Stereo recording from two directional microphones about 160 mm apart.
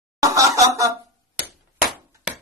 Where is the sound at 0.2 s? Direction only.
20° right (ahead or behind).